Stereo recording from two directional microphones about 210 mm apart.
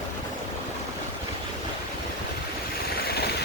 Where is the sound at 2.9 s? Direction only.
50° left (ahead or behind).